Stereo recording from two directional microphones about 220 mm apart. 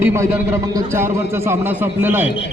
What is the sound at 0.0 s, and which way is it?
A man's voice, 10° right (ahead or behind).